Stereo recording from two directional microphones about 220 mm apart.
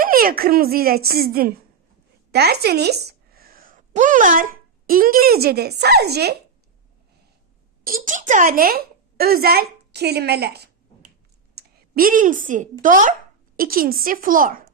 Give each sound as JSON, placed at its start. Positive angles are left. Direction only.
{"t": 0.0, "sound": "a child's voice", "side_deg": -40}
{"t": 7.9, "sound": "a woman's voice", "side_deg": -40}